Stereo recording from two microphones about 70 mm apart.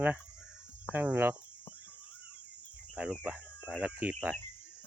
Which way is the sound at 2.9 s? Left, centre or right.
Centre.